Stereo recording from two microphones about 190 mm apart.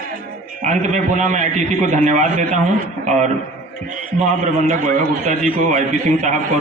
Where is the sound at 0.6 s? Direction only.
40° right (ahead or behind).